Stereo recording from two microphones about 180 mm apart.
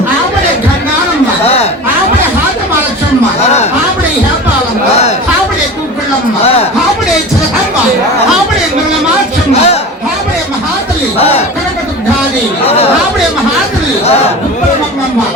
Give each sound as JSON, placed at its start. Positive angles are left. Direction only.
{"t": 6.4, "sound": "speech", "side_deg": 35}
{"t": 9.5, "sound": "a sound", "side_deg": 35}
{"t": 12.6, "sound": "speech", "side_deg": 35}